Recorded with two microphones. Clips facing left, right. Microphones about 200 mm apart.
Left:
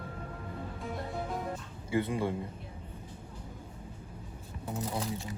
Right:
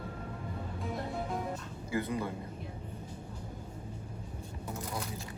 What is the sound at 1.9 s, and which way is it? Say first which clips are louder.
Speech: left 3 dB; 25° left (ahead or behind).